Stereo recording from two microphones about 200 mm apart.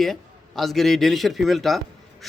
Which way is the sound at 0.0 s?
Centre (ahead or behind).